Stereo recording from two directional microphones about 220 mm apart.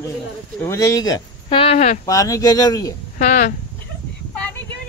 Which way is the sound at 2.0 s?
15° left (ahead or behind).